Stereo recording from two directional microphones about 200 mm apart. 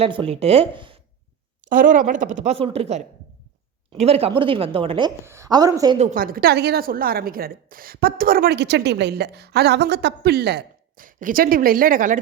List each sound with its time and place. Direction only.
0.0 s a woman's voice: 25° right (ahead or behind)
1.6 s a woman's voice: 40° right (ahead or behind); by 6.0 s 20° right (ahead or behind)
6.0 s a woman's voice: 40° right (ahead or behind)